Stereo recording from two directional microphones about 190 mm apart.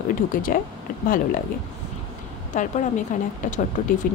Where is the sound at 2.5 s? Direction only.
40° left (ahead or behind).